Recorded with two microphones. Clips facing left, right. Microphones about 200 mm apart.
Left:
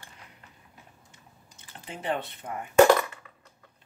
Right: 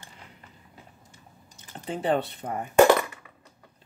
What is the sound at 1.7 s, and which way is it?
Speech, 35° right (ahead or behind).